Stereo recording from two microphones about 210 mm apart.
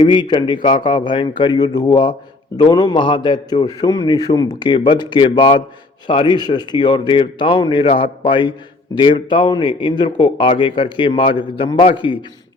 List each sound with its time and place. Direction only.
0.0 s a man's voice: 20° left (ahead or behind)